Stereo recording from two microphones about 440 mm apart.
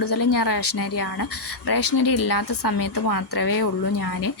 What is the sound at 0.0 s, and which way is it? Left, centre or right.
Speech, left.